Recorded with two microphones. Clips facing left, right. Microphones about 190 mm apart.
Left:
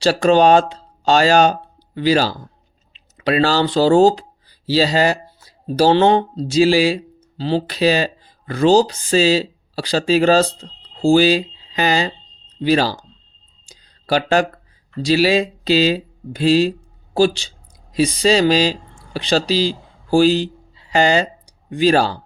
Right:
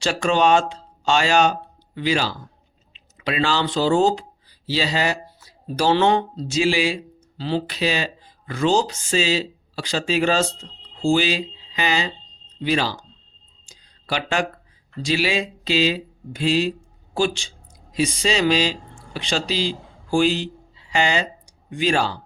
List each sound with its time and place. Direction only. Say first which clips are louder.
0.0 s speech: left 6 dB; 35° left (ahead or behind)
13.7 s a sound: left 8 dB; 40° left (ahead or behind)
15.0 s speech: left 7 dB; 40° left (ahead or behind)